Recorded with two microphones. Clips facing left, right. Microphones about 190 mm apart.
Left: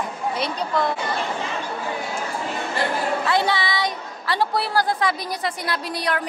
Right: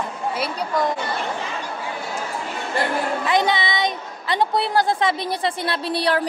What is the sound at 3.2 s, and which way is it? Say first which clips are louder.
A woman's voice: right 3 dB; 20° right (ahead or behind).